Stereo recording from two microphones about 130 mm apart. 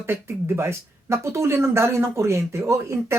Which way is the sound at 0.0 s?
20° right (ahead or behind).